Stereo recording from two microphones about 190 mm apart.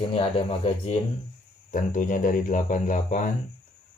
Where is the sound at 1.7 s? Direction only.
45° left (ahead or behind).